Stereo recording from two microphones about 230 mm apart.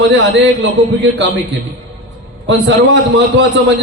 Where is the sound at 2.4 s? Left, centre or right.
Right.